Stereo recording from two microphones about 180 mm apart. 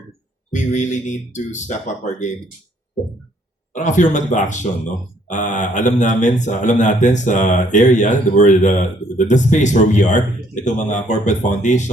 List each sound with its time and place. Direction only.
0.5 s speech: 40° left (ahead or behind)
3.7 s speech: 45° left (ahead or behind)